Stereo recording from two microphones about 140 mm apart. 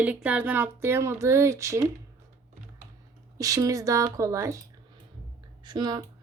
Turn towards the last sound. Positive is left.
turn(degrees=-30)  # may be behind; listen again after turning